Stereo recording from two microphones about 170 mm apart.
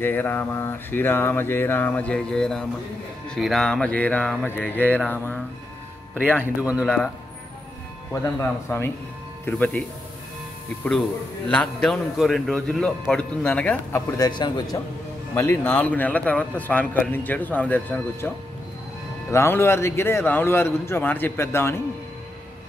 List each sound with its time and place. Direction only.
0.0 s a man's voice: 10° left (ahead or behind)
6.4 s speech: 10° right (ahead or behind)
8.1 s a man's voice: 15° left (ahead or behind)
11.4 s a man's voice: 5° left (ahead or behind)
14.3 s speech: 25° left (ahead or behind)
15.3 s a man's voice: 15° left (ahead or behind)
19.3 s a man's voice: 15° left (ahead or behind)